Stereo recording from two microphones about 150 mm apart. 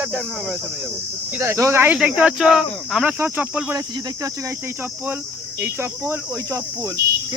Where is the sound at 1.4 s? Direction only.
20° right (ahead or behind).